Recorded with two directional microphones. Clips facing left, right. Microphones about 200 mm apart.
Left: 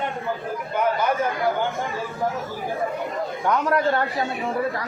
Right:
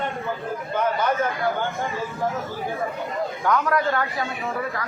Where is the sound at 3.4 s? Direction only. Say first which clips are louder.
Left 1 dB; 25° left (ahead or behind).